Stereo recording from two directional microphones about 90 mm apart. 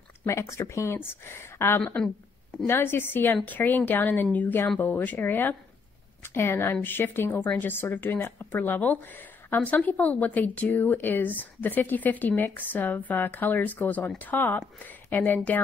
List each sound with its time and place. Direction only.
0.3 s speech: 30° left (ahead or behind)